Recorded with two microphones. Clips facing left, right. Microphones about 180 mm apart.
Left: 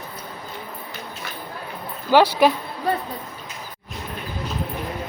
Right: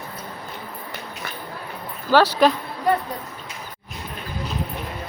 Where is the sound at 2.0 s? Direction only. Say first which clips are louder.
Left 1 dB; 15° left (ahead or behind).